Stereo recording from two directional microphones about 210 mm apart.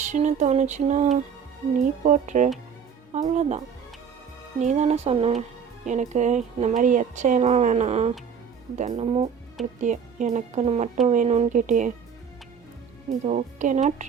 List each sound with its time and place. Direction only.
0.0 s speech: 35° right (ahead or behind)
4.6 s speech: 35° right (ahead or behind)
13.2 s speech: 35° right (ahead or behind)